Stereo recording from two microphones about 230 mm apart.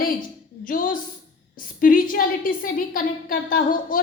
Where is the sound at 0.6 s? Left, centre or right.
Left.